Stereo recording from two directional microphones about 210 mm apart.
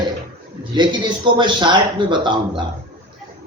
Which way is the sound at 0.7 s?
20° right (ahead or behind).